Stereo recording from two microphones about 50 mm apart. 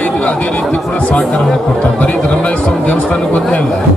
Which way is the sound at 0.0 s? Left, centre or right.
Left.